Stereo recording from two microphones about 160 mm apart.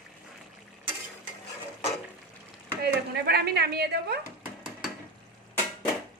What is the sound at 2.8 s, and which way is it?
Speech, 85° right.